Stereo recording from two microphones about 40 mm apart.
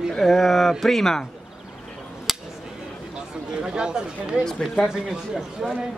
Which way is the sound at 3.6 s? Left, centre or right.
Centre.